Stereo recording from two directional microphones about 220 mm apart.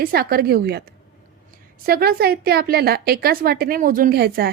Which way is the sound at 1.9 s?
45° right (ahead or behind).